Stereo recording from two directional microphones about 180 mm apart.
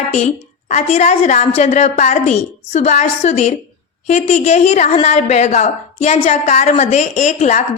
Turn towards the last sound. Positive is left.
turn(degrees=40)  # may be behind; listen again after turning